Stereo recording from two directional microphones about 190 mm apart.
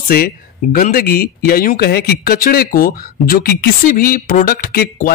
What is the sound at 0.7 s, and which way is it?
Speech, 50° left (ahead or behind).